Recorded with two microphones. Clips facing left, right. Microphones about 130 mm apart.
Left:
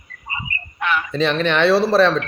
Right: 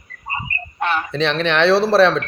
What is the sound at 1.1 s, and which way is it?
Speech, centre (ahead or behind).